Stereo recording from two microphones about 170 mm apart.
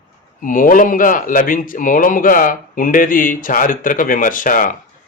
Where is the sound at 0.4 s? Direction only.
50° left (ahead or behind).